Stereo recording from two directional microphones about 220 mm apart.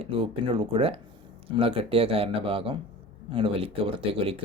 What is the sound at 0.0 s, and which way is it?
Speech, 25° right (ahead or behind).